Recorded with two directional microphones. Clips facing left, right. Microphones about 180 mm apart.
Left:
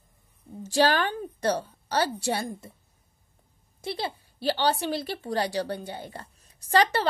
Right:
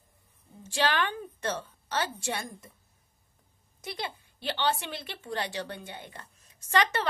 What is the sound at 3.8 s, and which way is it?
A woman's voice, 30° left (ahead or behind).